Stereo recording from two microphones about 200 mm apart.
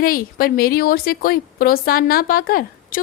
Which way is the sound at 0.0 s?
45° left (ahead or behind).